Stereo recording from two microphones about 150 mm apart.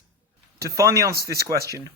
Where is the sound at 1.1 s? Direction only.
90° right.